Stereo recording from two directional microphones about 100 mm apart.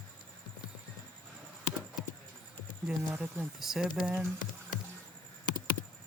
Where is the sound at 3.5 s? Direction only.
5° right (ahead or behind).